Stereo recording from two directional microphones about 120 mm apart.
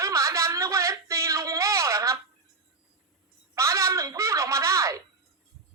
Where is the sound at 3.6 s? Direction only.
25° right (ahead or behind).